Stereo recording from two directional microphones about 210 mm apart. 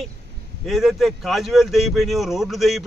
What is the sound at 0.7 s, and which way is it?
A man's voice, centre (ahead or behind).